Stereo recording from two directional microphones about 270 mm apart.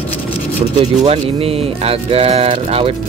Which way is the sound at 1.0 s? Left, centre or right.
Right.